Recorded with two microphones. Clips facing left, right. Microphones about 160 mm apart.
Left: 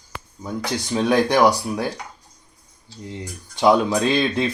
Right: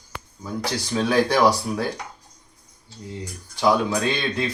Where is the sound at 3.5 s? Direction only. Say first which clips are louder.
Left 4 dB; 25° left (ahead or behind).